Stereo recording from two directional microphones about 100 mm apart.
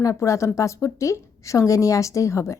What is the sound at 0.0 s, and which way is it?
Speech, 30° left (ahead or behind).